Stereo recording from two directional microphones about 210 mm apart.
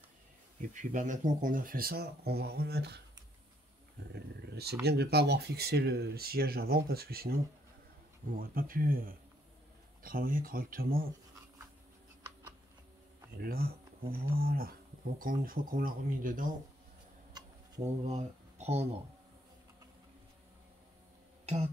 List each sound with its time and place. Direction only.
0.6 s speech: 35° right (ahead or behind)
4.1 s speech: 50° right (ahead or behind)
13.4 s speech: 45° right (ahead or behind)
18.0 s speech: 30° right (ahead or behind)